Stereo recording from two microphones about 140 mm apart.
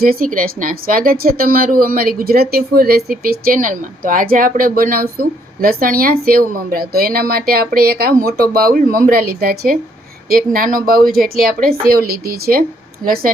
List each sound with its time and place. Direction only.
0.0 s a woman's voice: 90° right